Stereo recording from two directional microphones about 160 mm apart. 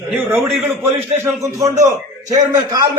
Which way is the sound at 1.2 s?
15° right (ahead or behind).